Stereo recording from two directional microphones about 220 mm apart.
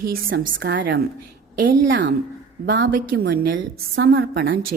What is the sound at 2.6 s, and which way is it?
Speech, 55° right (ahead or behind).